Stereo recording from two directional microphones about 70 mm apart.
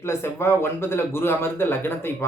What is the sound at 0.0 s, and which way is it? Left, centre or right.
Speech, left.